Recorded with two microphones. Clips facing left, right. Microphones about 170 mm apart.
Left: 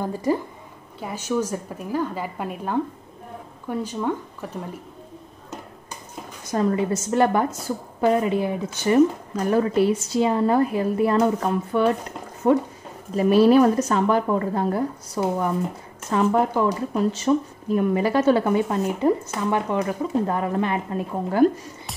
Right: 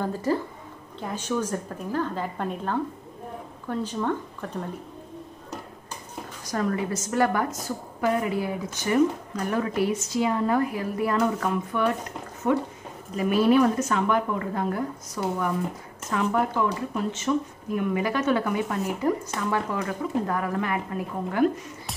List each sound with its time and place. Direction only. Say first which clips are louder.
0.0 s a woman's voice: left 2 dB; 15° left (ahead or behind)
6.5 s a woman's voice: left 5 dB; 25° left (ahead or behind)